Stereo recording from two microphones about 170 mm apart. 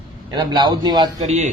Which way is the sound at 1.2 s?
40° right (ahead or behind).